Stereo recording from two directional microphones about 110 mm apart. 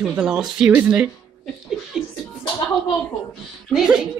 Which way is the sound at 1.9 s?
5° right (ahead or behind).